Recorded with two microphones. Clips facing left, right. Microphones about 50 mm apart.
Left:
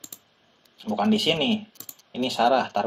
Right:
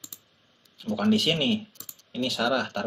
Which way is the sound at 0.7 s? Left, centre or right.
Centre.